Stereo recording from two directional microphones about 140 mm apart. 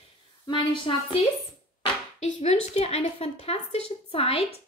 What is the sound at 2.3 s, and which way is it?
A woman's voice, 50° left (ahead or behind).